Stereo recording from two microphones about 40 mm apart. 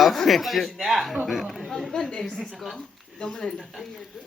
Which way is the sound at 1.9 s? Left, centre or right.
Centre.